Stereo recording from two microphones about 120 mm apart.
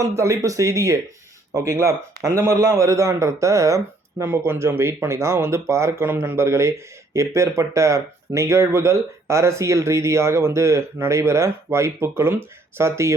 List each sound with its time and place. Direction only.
0.0 s speech: 25° right (ahead or behind)